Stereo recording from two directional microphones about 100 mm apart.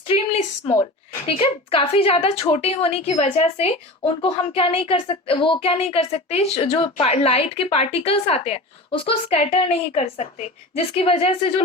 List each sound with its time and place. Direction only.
1.2 s a woman's voice: 70° left (ahead or behind); by 10.2 s 90° left
10.8 s speech: 70° left (ahead or behind)